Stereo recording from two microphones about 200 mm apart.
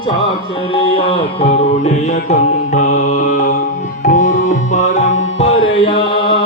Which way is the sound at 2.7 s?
40° left (ahead or behind).